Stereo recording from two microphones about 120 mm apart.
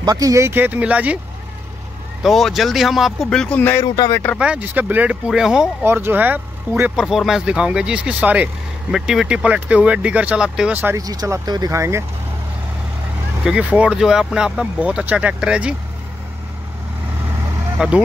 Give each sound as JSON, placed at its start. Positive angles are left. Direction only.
{"t": 0.0, "sound": "speech", "side_deg": -30}
{"t": 2.2, "sound": "speech", "side_deg": 0}
{"t": 3.8, "sound": "speech", "side_deg": 35}
{"t": 4.4, "sound": "speech", "side_deg": -10}
{"t": 5.9, "sound": "speech", "side_deg": -20}
{"t": 11.0, "sound": "speech", "side_deg": -30}
{"t": 13.4, "sound": "speech", "side_deg": -10}
{"t": 17.7, "sound": "speech", "side_deg": -10}